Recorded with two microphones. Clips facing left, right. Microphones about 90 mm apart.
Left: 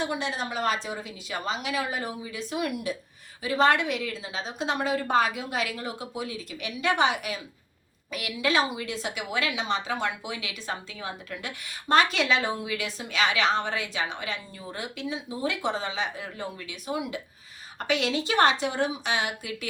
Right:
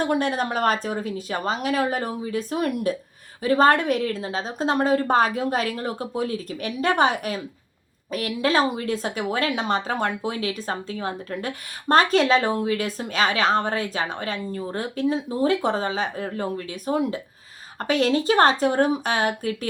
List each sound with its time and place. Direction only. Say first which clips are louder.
0.0 s speech: right 7 dB; 50° right (ahead or behind)